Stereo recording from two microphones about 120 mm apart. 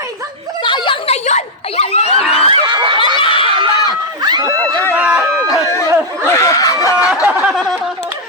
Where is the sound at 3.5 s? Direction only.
40° right (ahead or behind).